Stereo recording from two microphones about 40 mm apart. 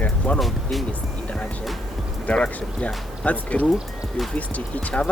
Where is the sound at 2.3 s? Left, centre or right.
Left.